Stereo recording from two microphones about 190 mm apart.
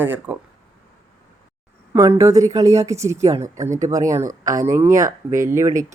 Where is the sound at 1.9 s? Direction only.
15° right (ahead or behind).